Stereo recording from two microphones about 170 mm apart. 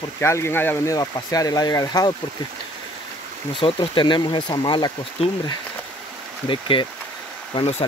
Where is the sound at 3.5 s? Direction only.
30° left (ahead or behind).